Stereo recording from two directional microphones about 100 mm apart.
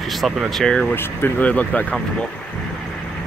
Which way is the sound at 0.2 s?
Centre (ahead or behind).